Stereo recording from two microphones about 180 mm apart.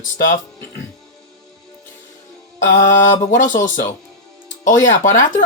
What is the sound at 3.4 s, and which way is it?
Speech, 45° left (ahead or behind).